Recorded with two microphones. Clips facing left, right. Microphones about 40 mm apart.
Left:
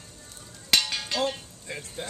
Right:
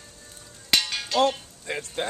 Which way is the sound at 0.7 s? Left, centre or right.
Centre.